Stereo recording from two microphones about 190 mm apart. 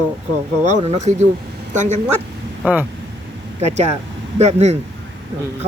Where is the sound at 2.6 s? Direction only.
10° right (ahead or behind).